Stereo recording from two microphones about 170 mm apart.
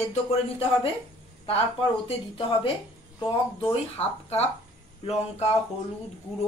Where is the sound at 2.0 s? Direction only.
30° left (ahead or behind).